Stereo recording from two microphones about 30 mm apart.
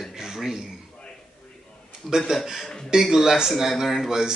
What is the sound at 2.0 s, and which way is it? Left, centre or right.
Speech, centre.